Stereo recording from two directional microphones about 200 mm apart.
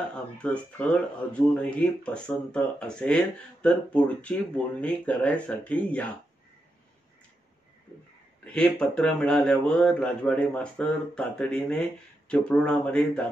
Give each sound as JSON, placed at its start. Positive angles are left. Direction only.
{"t": 0.4, "sound": "speech", "side_deg": 5}
{"t": 8.5, "sound": "speech", "side_deg": 5}